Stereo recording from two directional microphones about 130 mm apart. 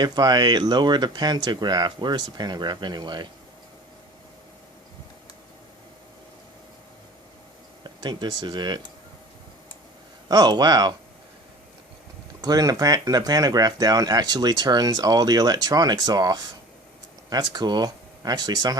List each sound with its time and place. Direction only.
0.0 s speech: 30° right (ahead or behind)
7.9 s a sound: 35° right (ahead or behind)
8.4 s speech: 35° right (ahead or behind)
10.2 s speech: 30° right (ahead or behind)
12.4 s speech: 30° right (ahead or behind)